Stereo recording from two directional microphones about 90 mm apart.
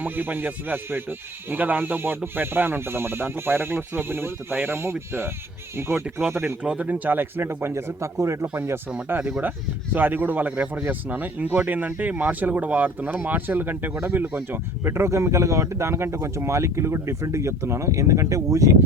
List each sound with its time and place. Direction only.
0.0 s speech: 20° right (ahead or behind)
6.6 s speech: 15° right (ahead or behind); by 18.8 s 35° right (ahead or behind)